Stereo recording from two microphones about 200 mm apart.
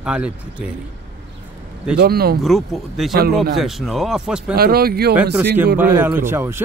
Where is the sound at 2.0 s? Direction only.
50° right (ahead or behind).